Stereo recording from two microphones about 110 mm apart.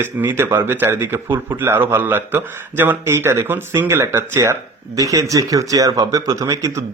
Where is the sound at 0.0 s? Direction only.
20° right (ahead or behind).